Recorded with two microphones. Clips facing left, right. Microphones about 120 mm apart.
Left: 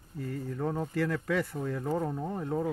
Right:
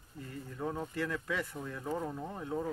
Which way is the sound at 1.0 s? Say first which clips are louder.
Left 6 dB; 45° left (ahead or behind).